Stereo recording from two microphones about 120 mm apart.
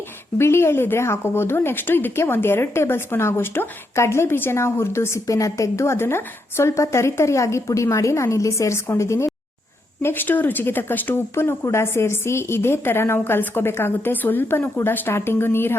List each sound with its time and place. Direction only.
0.3 s speech: 20° left (ahead or behind)